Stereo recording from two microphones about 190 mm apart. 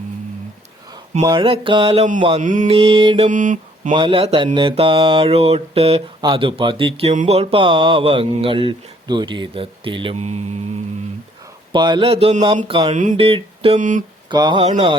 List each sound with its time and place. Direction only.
1.2 s mantra: 25° right (ahead or behind)
2.4 s mantra: 40° right (ahead or behind); by 3.2 s 25° right (ahead or behind)
3.2 s mantra: 45° right (ahead or behind)
3.9 s mantra: 25° right (ahead or behind)
11.7 s mantra: 25° right (ahead or behind)
12.9 s speech: 40° right (ahead or behind)
13.1 s a sound: 30° right (ahead or behind)
13.7 s speech: 40° right (ahead or behind)
14.3 s mantra: 25° right (ahead or behind)
14.7 s mantra: 35° right (ahead or behind)